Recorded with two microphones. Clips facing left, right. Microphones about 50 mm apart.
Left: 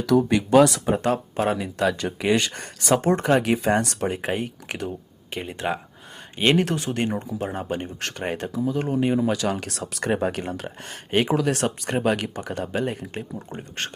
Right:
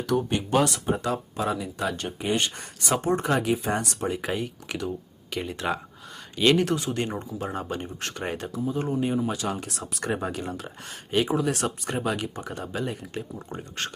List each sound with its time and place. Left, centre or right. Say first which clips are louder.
0.1 s speech: left 7 dB; left
1.0 s speech: left 5 dB; left
4.0 s speech: left 3 dB; left
5.3 s speech: left 1 dB; left
6.7 s speech: left 2 dB; left
8.8 s speech: left 4 dB; left
9.3 s speech: left 5 dB; left
13.5 s speech: right 2 dB; left